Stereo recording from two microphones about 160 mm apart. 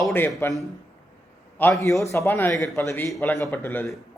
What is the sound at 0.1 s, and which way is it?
Speech, 15° left (ahead or behind).